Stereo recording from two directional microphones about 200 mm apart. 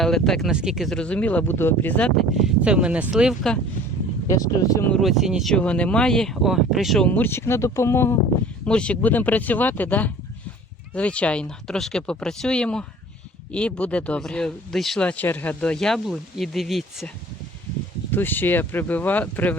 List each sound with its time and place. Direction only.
0.0 s speech: centre (ahead or behind)
2.6 s speech: 5° right (ahead or behind)
4.3 s speech: 15° left (ahead or behind)
4.9 s speech: centre (ahead or behind)
18.1 s speech: 10° left (ahead or behind)